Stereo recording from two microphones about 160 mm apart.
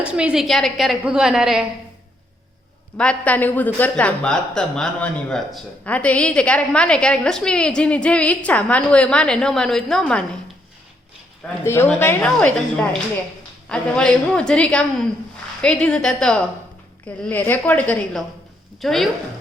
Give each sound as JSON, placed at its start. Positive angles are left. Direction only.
{"t": 0.0, "sound": "a woman's voice", "side_deg": -5}
{"t": 3.0, "sound": "a woman's voice", "side_deg": 10}
{"t": 11.6, "sound": "speech", "side_deg": 15}
{"t": 13.7, "sound": "a woman's voice", "side_deg": 5}